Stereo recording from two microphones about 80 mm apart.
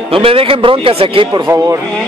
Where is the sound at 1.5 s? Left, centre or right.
Right.